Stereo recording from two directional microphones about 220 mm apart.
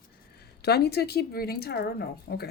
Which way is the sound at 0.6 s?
45° left (ahead or behind).